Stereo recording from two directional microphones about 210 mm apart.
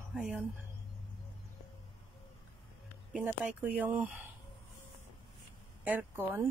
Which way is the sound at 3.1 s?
5° right (ahead or behind).